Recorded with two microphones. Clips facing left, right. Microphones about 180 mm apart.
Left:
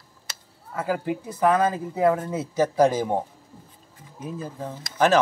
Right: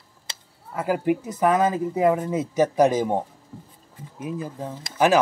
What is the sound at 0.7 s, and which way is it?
Speech, 15° right (ahead or behind).